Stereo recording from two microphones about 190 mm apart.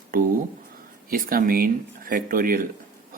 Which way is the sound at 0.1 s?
50° right (ahead or behind).